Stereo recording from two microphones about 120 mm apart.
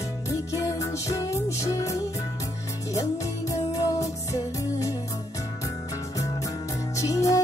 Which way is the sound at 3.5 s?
25° left (ahead or behind).